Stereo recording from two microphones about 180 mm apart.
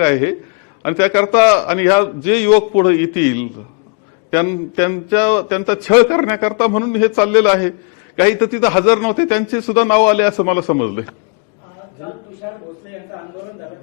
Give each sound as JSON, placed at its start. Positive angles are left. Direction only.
{"t": 0.0, "sound": "a man's voice", "side_deg": 15}